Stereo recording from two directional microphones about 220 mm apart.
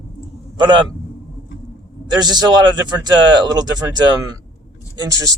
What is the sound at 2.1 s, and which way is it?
Speech, 20° right (ahead or behind).